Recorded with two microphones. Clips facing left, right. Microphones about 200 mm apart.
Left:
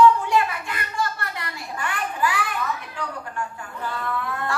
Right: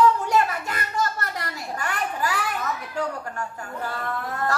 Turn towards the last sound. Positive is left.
turn(degrees=-40)  # may be behind; listen again after turning